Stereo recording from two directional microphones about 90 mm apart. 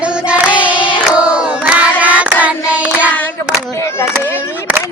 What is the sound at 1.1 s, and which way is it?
Hands, 10° right (ahead or behind).